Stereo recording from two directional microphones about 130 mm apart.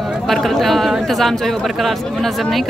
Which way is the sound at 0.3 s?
Centre (ahead or behind).